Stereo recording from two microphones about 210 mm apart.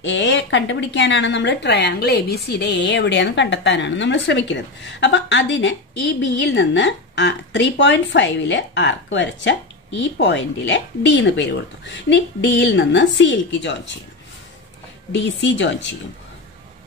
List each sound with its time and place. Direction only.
0.0 s a woman's voice: 60° left (ahead or behind)
15.1 s a woman's voice: 60° left (ahead or behind)